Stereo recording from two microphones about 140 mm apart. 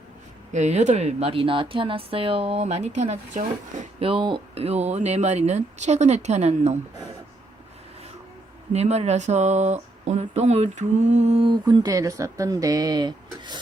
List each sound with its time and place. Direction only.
0.5 s a woman's voice: 55° right (ahead or behind)
4.0 s a woman's voice: 40° right (ahead or behind)
8.7 s a woman's voice: 50° right (ahead or behind)
11.6 s speech: 25° right (ahead or behind)